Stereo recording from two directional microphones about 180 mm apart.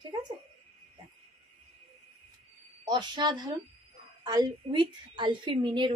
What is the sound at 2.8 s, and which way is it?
A woman's voice, 25° right (ahead or behind).